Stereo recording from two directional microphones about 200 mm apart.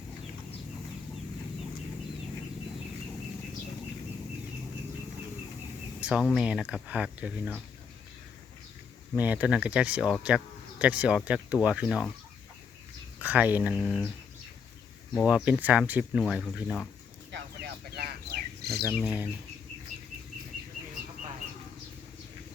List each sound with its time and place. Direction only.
6.0 s speech: 5° right (ahead or behind)
9.1 s speech: 10° right (ahead or behind)
13.1 s speech: 5° right (ahead or behind)
15.1 s speech: 5° left (ahead or behind)
15.4 s speech: 5° right (ahead or behind)
17.3 s a sound: 55° right (ahead or behind)
18.9 s speech: 5° right (ahead or behind)